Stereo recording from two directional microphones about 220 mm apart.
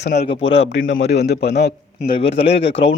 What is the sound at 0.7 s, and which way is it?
A man's voice, 60° left (ahead or behind).